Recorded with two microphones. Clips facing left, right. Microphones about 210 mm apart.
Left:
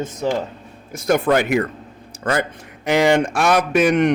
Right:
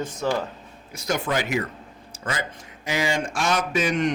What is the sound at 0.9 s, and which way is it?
A man's voice, 50° left (ahead or behind).